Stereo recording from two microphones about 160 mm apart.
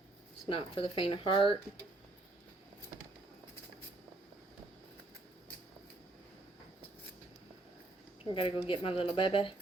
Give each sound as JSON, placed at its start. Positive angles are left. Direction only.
{"t": 0.4, "sound": "speech", "side_deg": 35}
{"t": 8.2, "sound": "speech", "side_deg": 30}